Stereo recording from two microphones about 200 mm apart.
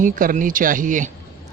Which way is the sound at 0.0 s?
40° right (ahead or behind).